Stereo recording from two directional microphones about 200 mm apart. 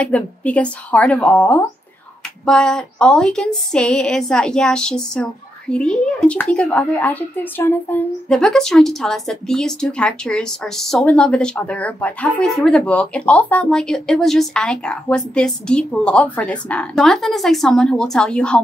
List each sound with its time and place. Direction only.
0.0 s speech: 5° left (ahead or behind)